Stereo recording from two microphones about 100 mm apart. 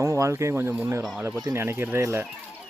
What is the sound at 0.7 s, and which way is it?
A man's voice, 15° right (ahead or behind).